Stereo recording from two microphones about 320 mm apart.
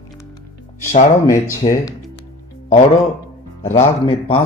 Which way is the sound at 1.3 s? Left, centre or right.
Centre.